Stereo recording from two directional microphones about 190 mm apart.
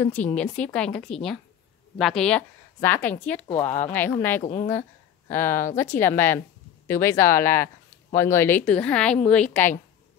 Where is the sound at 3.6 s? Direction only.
40° left (ahead or behind).